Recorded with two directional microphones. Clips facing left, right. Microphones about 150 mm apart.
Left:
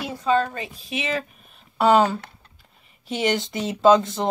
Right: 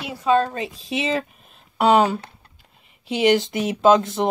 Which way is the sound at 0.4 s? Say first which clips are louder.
Right 3 dB; 25° right (ahead or behind).